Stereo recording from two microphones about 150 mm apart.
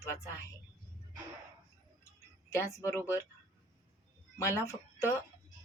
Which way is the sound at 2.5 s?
15° left (ahead or behind).